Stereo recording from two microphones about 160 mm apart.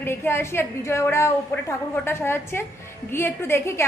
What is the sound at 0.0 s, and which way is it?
A woman's voice, 15° left (ahead or behind).